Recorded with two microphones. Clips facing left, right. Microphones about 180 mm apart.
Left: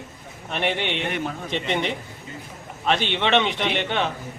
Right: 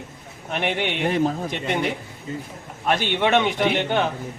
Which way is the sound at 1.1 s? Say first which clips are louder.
Right 7 dB; 35° right (ahead or behind).